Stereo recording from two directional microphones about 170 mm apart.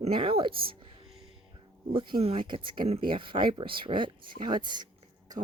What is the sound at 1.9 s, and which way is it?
Speech, 30° right (ahead or behind).